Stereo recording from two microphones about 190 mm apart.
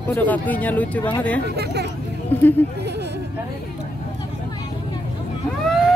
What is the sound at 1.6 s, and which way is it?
Speech, 60° right (ahead or behind).